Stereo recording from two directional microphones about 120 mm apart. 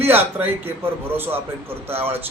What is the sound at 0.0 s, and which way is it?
A man's voice, 15° right (ahead or behind).